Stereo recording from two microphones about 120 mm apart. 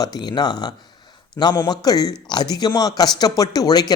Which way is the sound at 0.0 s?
35° left (ahead or behind).